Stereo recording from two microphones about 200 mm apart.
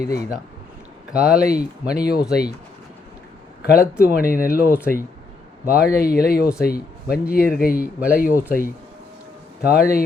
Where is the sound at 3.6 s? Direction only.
50° left (ahead or behind).